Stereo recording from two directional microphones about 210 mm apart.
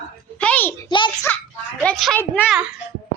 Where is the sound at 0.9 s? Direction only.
20° left (ahead or behind).